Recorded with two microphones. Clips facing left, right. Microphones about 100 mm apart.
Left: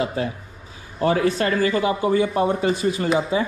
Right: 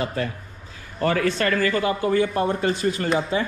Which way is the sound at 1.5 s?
25° left (ahead or behind).